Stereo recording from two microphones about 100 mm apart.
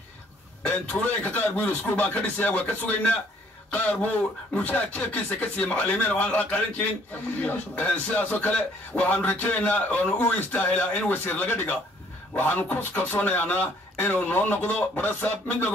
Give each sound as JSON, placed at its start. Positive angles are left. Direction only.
{"t": 0.7, "sound": "a man's voice", "side_deg": 15}